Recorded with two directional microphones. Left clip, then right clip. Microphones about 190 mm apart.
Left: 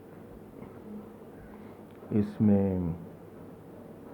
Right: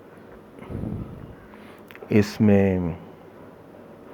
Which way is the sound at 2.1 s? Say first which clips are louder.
Right 8 dB; 35° right (ahead or behind).